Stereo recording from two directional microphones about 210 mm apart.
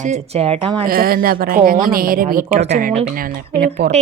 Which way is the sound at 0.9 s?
45° right (ahead or behind).